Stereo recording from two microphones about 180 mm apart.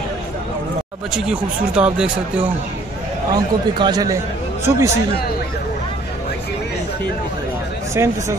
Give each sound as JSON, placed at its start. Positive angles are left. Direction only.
{"t": 1.1, "sound": "speech", "side_deg": -5}
{"t": 3.3, "sound": "a man's voice", "side_deg": -20}
{"t": 7.9, "sound": "speech", "side_deg": -15}